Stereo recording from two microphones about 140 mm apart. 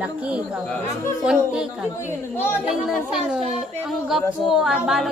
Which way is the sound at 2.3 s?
15° left (ahead or behind).